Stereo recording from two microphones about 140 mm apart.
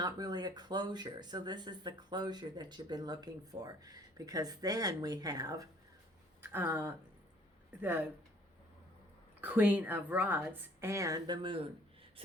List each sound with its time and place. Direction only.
0.0 s speech: 30° right (ahead or behind)
6.4 s a woman's voice: 15° right (ahead or behind)
9.4 s a woman's voice: 10° right (ahead or behind); by 11.7 s 35° right (ahead or behind)